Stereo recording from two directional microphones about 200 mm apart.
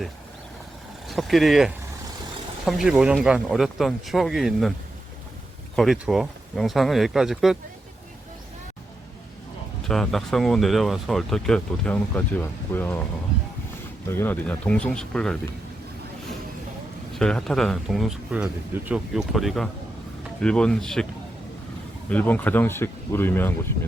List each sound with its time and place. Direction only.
1.0 s speech: centre (ahead or behind)
5.7 s speech: centre (ahead or behind)
9.8 s speech: centre (ahead or behind)
14.1 s speech: 10° left (ahead or behind)
17.2 s speech: 5° left (ahead or behind)
22.1 s speech: 10° left (ahead or behind)